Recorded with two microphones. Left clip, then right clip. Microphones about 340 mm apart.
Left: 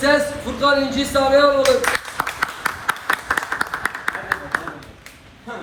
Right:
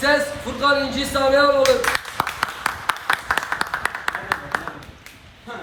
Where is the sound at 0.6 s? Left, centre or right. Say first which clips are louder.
Left 2 dB; centre.